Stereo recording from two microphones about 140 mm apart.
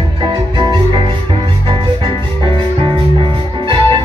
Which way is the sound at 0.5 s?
30° right (ahead or behind).